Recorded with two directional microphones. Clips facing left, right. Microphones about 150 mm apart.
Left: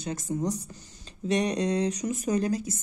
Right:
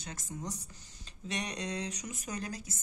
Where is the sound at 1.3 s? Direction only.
35° left (ahead or behind).